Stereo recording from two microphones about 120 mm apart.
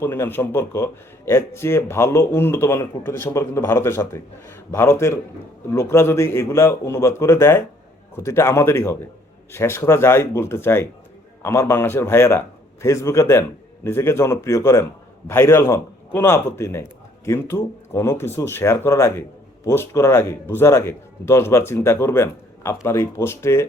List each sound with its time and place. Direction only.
0.0 s a man's voice: 20° left (ahead or behind)